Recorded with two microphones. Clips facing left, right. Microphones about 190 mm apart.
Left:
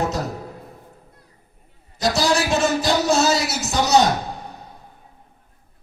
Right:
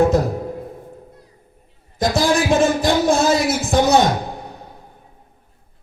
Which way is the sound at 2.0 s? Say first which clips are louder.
Right 3 dB; 50° right (ahead or behind).